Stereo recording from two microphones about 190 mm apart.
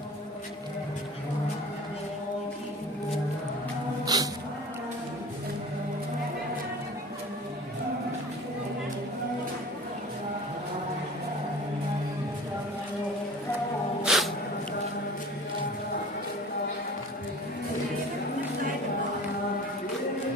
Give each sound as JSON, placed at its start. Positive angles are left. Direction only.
{"t": 4.0, "sound": "music", "side_deg": -20}
{"t": 14.0, "sound": "music", "side_deg": 0}